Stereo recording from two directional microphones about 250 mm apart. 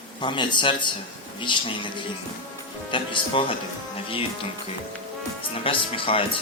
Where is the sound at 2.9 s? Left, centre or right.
Centre.